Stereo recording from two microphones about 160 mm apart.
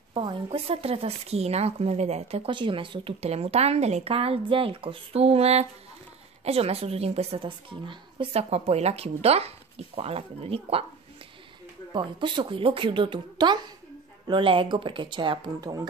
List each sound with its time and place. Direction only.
0.1 s speech: 35° right (ahead or behind)
11.9 s speech: 30° right (ahead or behind)